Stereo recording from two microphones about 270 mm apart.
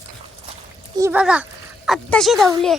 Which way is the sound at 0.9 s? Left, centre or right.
Centre.